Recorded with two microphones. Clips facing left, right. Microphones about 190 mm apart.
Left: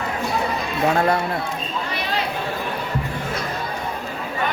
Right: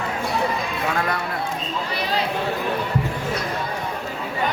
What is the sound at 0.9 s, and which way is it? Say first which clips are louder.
Speech: left 7 dB; 30° left (ahead or behind).